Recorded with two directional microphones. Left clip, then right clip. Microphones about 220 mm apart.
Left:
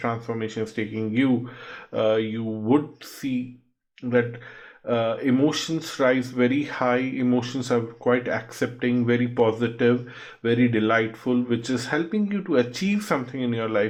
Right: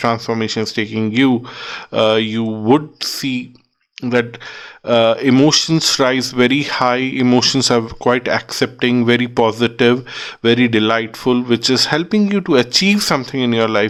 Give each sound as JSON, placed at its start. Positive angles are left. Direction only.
{"t": 0.0, "sound": "speech", "side_deg": -45}